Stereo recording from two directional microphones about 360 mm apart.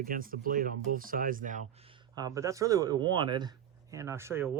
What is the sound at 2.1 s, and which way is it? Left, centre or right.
Speech, centre.